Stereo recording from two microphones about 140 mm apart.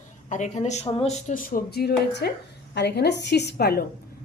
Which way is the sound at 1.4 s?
90° left.